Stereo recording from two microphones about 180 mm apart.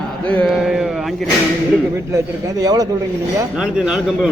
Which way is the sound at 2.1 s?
20° right (ahead or behind).